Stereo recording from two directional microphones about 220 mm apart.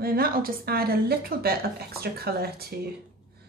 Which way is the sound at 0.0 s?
45° right (ahead or behind).